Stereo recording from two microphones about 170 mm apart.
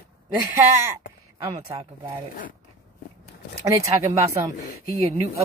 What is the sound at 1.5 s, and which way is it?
Speech, 35° right (ahead or behind).